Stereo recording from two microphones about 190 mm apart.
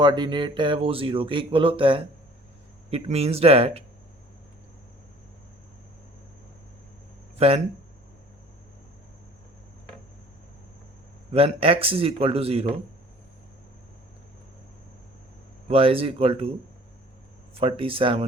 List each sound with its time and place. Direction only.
0.0 s a man's voice: 25° right (ahead or behind)
7.3 s speech: 30° right (ahead or behind)
11.3 s a man's voice: 30° right (ahead or behind)
15.7 s speech: 30° right (ahead or behind)
17.5 s speech: 30° right (ahead or behind)